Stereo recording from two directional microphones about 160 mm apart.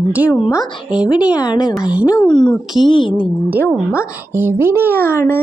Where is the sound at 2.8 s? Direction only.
30° left (ahead or behind).